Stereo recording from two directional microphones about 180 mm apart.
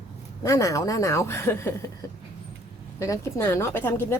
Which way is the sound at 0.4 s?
15° left (ahead or behind).